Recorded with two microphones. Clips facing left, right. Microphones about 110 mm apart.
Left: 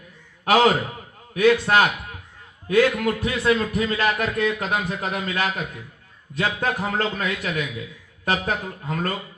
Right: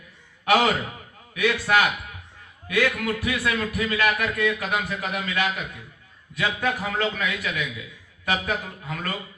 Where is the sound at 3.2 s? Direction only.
30° left (ahead or behind).